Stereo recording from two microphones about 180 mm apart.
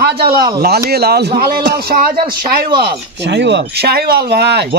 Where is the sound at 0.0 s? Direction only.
60° right (ahead or behind).